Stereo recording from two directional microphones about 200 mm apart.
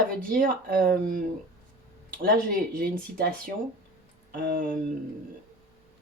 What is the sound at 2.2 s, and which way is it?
Speech, 45° right (ahead or behind).